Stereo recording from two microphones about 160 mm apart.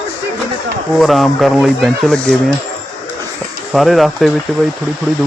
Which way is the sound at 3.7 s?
Centre (ahead or behind).